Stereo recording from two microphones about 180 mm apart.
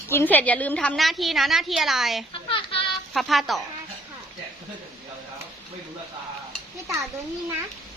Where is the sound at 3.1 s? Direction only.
Centre (ahead or behind).